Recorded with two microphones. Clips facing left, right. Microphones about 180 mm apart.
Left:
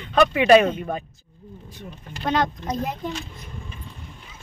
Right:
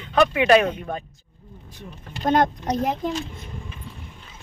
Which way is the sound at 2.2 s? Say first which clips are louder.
Right 4 dB; 45° right (ahead or behind).